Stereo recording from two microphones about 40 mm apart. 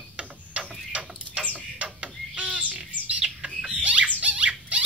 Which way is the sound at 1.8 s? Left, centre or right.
Right.